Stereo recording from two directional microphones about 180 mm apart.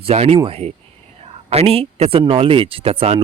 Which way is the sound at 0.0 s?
35° right (ahead or behind).